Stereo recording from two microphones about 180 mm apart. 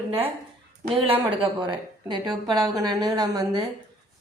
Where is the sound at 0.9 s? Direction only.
30° right (ahead or behind).